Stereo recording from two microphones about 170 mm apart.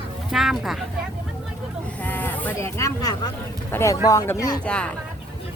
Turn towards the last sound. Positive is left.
turn(degrees=5)  # may be behind; listen again after turning